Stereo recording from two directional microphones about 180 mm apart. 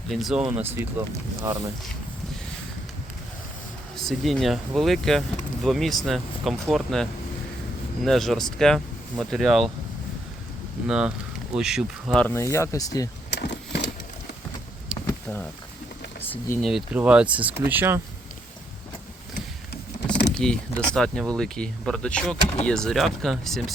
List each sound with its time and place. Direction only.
0.1 s speech: centre (ahead or behind)
0.5 s speech: 10° right (ahead or behind)
3.9 s speech: centre (ahead or behind)
10.8 s speech: 5° right (ahead or behind); by 13.1 s 20° left (ahead or behind)
13.3 s vehicle: 70° left (ahead or behind)
15.0 s a sound: 10° left (ahead or behind)
16.6 s speech: centre (ahead or behind)
20.3 s a sound: 5° left (ahead or behind)
20.9 s speech: 5° left (ahead or behind)